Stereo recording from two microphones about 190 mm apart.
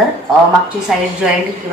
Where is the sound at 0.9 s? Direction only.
Centre (ahead or behind).